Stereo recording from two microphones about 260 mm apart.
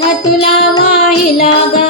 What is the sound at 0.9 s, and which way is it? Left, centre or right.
Child singing, left.